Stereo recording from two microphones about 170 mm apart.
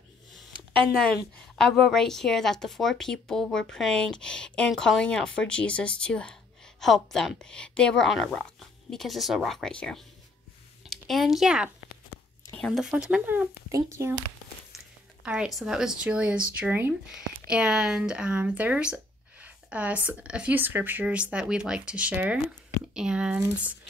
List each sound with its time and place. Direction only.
1.6 s speech: centre (ahead or behind); by 14.1 s 15° right (ahead or behind)
15.2 s speech: 5° right (ahead or behind)